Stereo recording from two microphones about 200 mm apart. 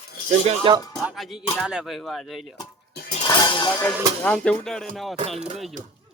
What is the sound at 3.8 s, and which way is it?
Speech, 5° left (ahead or behind).